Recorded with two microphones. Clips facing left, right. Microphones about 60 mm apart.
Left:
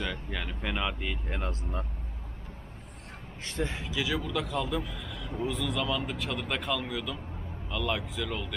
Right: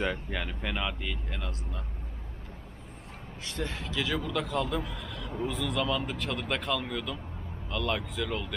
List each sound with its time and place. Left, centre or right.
0.3 s a man's voice: centre
1.3 s speech: left
3.4 s speech: left
3.7 s a man's voice: centre